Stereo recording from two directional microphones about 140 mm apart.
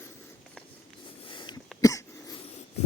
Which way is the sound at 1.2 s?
35° left (ahead or behind).